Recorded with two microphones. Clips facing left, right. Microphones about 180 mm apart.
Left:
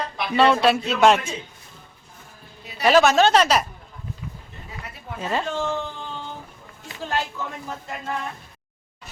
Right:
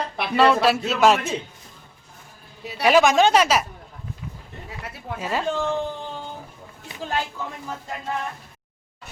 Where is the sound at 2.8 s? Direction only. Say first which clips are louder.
Even; 10° right (ahead or behind).